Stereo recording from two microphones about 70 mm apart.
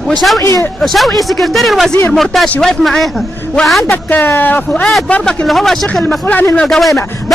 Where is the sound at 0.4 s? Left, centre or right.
Left.